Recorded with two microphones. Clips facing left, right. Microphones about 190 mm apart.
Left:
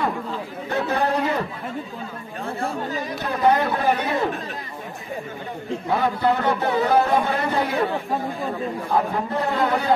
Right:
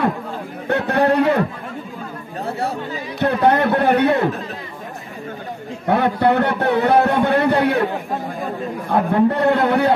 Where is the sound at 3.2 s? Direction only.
65° right (ahead or behind).